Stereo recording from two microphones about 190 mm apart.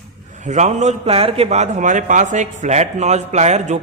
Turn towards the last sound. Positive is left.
turn(degrees=-35)  # may be behind; listen again after turning